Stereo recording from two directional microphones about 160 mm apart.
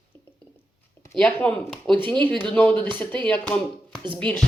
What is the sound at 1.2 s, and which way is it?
Speech, 10° left (ahead or behind).